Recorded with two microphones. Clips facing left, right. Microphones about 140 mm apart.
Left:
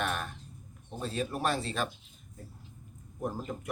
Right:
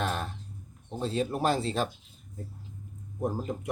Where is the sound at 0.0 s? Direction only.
30° right (ahead or behind).